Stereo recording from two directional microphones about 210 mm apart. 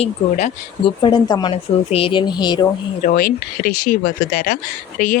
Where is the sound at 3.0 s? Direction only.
40° left (ahead or behind).